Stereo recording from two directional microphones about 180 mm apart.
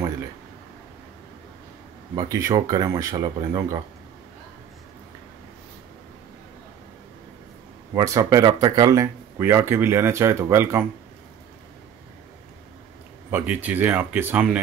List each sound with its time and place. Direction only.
2.1 s speech: 15° right (ahead or behind)
7.9 s speech: 20° right (ahead or behind)
13.3 s speech: 10° right (ahead or behind)